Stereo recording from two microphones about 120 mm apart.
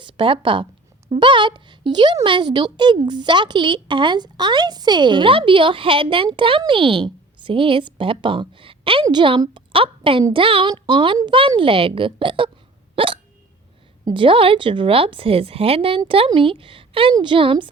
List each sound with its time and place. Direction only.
0.0 s a woman's voice: 45° right (ahead or behind)